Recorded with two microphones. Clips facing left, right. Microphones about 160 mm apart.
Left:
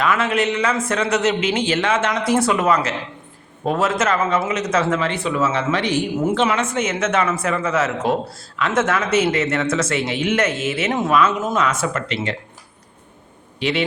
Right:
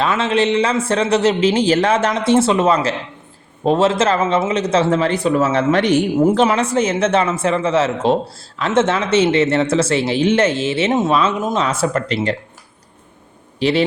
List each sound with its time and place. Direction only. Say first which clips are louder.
0.0 s speech: right 3 dB; 25° right (ahead or behind)
13.6 s a man's voice: right 5 dB; 35° right (ahead or behind)